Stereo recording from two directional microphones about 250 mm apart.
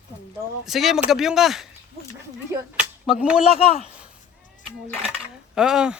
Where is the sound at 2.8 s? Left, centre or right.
Centre.